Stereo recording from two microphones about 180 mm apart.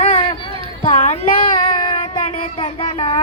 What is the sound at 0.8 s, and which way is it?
Child singing, 40° left (ahead or behind).